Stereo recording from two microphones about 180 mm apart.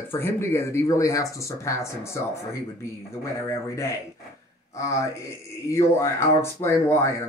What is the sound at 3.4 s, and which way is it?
Speech, 15° left (ahead or behind).